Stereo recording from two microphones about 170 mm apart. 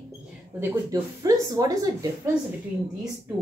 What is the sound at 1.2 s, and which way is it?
Speech, 20° right (ahead or behind).